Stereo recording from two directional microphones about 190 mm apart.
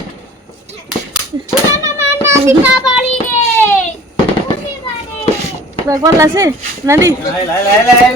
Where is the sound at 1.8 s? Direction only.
15° right (ahead or behind).